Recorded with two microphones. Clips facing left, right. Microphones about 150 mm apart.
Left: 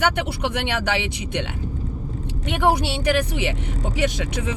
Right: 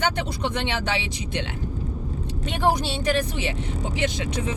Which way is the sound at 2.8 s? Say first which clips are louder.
Left 2 dB; 65° left (ahead or behind).